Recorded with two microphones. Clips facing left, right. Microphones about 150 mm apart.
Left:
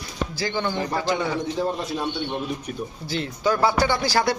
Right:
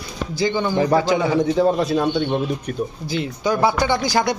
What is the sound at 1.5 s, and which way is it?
Speech, 90° right.